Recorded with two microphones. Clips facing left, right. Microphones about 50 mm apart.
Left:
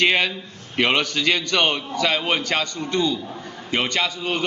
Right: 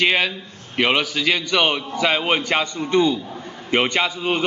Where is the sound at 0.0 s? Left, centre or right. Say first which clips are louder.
Even; centre.